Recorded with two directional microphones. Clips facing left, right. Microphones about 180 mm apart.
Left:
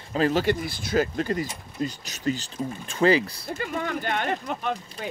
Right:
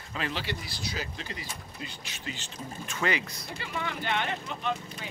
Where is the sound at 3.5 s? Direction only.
45° left (ahead or behind).